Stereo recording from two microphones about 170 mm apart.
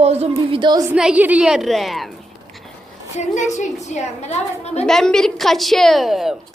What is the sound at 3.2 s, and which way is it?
A woman's voice, 45° left (ahead or behind).